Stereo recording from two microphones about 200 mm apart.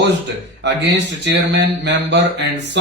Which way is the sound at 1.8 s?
60° right (ahead or behind).